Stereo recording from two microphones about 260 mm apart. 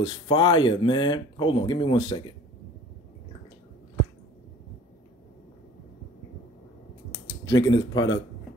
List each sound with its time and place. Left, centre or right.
0.0 s speech: centre
7.1 s typing: centre